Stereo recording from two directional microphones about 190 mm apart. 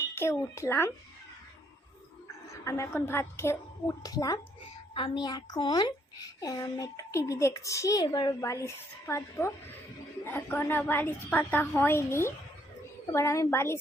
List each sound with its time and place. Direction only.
0.0 s a child's voice: 15° left (ahead or behind)
2.5 s a woman's voice: 15° left (ahead or behind)